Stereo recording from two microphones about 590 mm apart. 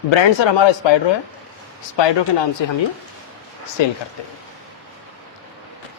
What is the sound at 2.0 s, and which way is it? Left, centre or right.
Speech, left.